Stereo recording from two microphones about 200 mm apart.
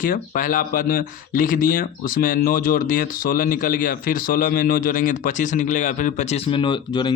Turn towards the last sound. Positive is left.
turn(degrees=20)  # may be behind; listen again after turning